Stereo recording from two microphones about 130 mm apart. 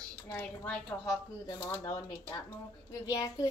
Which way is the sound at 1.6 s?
25° left (ahead or behind).